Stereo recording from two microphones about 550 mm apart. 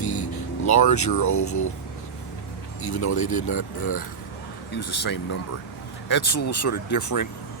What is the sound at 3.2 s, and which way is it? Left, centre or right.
Speech, centre.